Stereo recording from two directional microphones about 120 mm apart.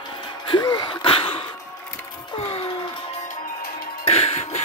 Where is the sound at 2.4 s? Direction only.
55° left (ahead or behind).